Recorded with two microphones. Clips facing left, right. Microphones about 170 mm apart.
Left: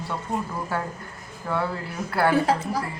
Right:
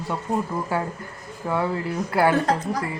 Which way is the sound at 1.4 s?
20° right (ahead or behind).